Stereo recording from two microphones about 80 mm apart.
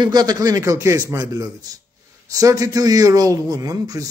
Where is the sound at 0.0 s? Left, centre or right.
Right.